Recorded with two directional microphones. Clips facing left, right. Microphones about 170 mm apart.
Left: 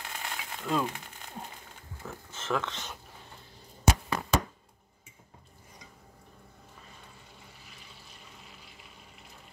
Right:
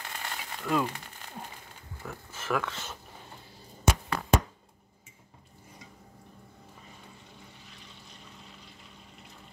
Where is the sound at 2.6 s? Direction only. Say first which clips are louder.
Right 1 dB; 15° left (ahead or behind).